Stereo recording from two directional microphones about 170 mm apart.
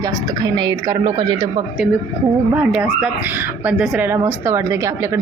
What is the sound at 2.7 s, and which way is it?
Speech, 5° right (ahead or behind).